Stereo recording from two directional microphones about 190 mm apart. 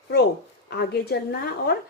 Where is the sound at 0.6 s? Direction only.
60° left (ahead or behind).